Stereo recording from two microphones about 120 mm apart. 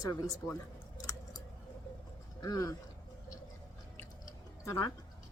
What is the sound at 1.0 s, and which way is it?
Scissors, 30° left (ahead or behind).